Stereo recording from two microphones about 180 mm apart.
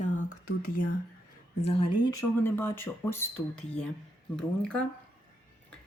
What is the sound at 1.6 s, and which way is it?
Speech, 35° left (ahead or behind).